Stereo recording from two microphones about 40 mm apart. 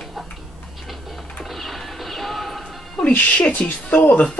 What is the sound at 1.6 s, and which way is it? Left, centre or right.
Horse, centre.